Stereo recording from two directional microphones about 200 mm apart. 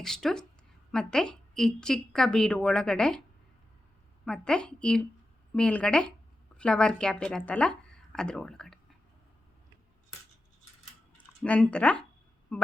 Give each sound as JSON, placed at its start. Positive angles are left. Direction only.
{"t": 0.0, "sound": "a woman's voice", "side_deg": 0}
{"t": 4.3, "sound": "a woman's voice", "side_deg": 5}
{"t": 11.4, "sound": "a woman's voice", "side_deg": 5}